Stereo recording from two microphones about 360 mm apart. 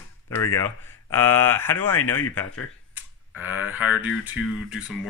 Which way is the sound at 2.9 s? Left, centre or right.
Centre.